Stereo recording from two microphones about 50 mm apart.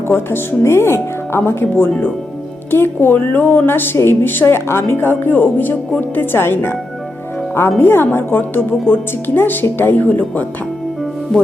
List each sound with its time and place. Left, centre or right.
0.3 s a woman's voice: left
3.9 s a woman's voice: left
4.4 s a woman's voice: left
7.8 s a woman's voice: left
10.1 s speech: left